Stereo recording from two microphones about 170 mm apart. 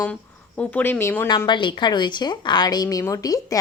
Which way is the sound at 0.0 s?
10° left (ahead or behind).